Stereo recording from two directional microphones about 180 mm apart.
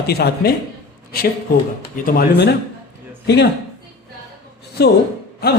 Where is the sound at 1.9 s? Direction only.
60° left (ahead or behind).